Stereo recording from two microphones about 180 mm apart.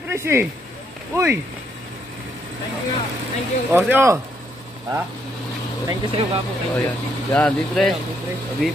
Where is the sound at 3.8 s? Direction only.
10° right (ahead or behind).